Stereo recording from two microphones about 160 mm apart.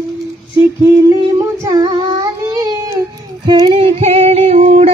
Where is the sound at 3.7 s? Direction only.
40° right (ahead or behind).